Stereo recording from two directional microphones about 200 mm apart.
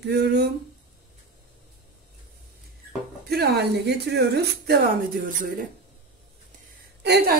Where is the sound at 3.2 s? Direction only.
50° right (ahead or behind).